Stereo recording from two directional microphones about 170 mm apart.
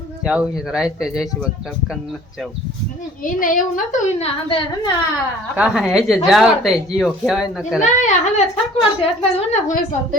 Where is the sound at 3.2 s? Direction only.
55° left (ahead or behind).